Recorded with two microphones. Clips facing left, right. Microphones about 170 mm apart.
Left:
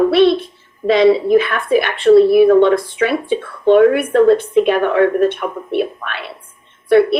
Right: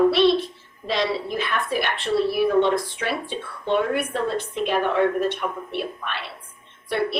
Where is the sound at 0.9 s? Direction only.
60° left (ahead or behind).